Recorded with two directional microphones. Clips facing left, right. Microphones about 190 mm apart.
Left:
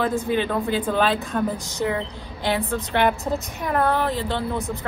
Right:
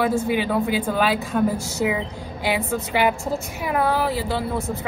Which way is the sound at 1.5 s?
15° left (ahead or behind).